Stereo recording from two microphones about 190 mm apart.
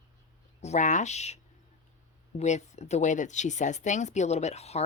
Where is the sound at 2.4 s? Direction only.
35° left (ahead or behind).